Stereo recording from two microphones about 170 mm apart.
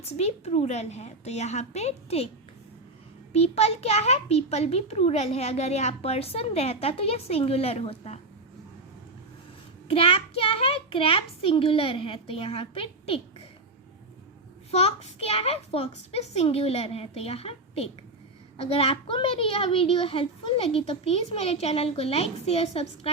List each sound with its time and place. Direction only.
0.0 s a child's voice: 40° left (ahead or behind)
3.3 s a child's voice: 35° left (ahead or behind)
9.9 s a child's voice: 35° left (ahead or behind)
14.7 s a child's voice: 35° left (ahead or behind)